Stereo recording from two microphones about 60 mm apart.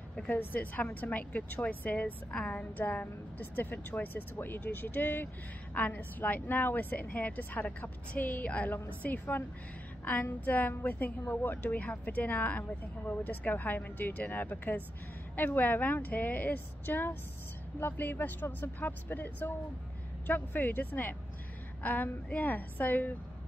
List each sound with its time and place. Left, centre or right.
0.3 s a woman's voice: left